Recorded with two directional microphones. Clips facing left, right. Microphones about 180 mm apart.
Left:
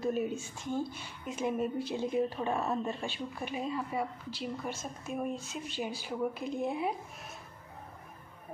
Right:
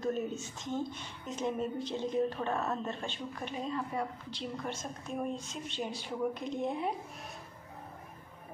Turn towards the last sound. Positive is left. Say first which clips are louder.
# left 1 dB
turn(degrees=5)  # may be behind; listen again after turning